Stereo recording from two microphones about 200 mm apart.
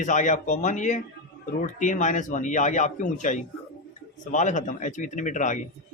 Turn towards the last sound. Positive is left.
turn(degrees=40)  # may be behind; listen again after turning